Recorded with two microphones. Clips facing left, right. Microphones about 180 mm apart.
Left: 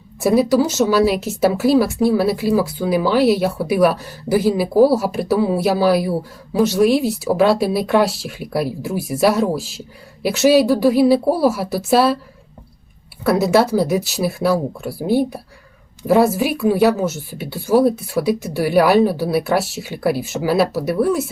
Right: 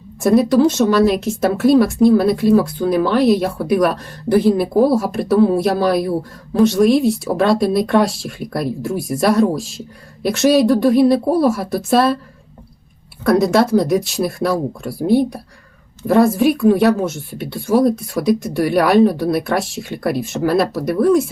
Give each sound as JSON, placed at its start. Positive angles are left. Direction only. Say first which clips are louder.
{"t": 0.2, "sound": "speech", "louder": "right 2 dB", "side_deg": 5}
{"t": 13.2, "sound": "speech", "louder": "right 1 dB", "side_deg": 5}